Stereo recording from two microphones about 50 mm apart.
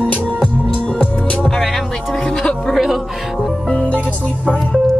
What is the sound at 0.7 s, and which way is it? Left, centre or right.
Music, left.